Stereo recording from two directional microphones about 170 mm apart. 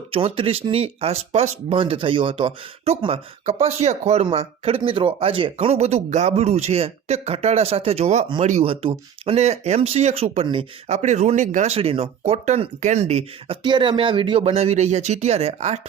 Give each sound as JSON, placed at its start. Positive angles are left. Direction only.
{"t": 0.1, "sound": "speech", "side_deg": -35}